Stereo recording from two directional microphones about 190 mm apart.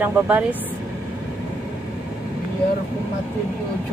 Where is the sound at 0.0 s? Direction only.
10° right (ahead or behind).